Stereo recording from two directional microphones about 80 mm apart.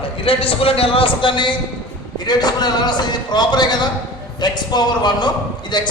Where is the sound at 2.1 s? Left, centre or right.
Left.